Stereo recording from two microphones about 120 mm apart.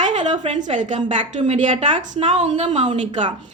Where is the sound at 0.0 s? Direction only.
80° right.